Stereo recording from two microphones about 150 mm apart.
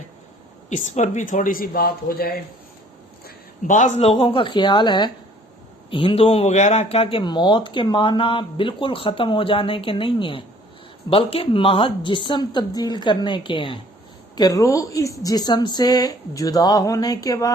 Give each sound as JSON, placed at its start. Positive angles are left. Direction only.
{"t": 0.9, "sound": "speech", "side_deg": 55}
{"t": 3.2, "sound": "speech", "side_deg": 60}
{"t": 14.3, "sound": "a woman's voice", "side_deg": 25}